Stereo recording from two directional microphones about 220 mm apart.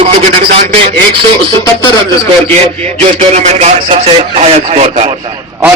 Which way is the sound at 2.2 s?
10° left (ahead or behind).